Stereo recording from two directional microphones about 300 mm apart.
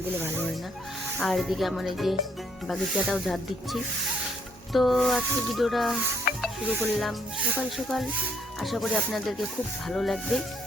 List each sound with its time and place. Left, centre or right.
1.2 s speech: centre
6.3 s music: left
7.0 s speech: centre